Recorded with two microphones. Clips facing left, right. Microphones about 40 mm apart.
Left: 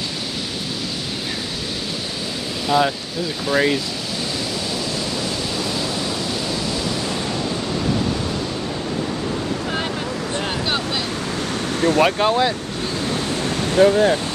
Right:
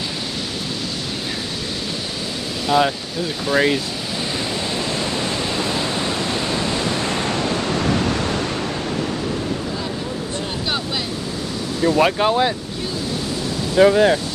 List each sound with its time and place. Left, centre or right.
2.7 s speech: centre
5.6 s pink noise: right
6.5 s waves: right
12.0 s speech: centre
13.7 s speech: right